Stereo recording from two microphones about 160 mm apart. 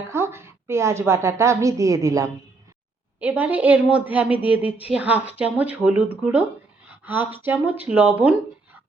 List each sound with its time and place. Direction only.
0.1 s a woman's voice: 15° right (ahead or behind)